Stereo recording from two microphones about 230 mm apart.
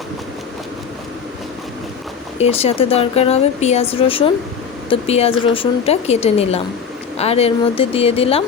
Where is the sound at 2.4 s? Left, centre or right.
Left.